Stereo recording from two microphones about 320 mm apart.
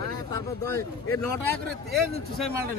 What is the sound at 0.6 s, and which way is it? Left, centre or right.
Speech, centre.